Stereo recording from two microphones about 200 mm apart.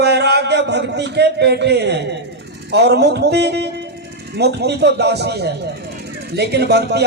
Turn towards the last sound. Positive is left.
turn(degrees=-55)  # may be behind; listen again after turning